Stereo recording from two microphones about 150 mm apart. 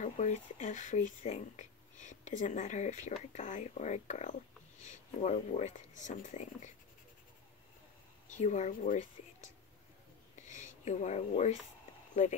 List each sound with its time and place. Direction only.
0.0 s speech: 55° left (ahead or behind)
8.3 s speech: 55° left (ahead or behind)
10.4 s speech: 55° left (ahead or behind)